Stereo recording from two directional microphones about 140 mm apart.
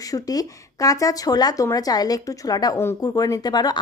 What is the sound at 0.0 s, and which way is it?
Speech, 25° left (ahead or behind).